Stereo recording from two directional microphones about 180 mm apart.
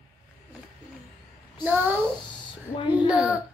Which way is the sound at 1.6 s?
10° right (ahead or behind).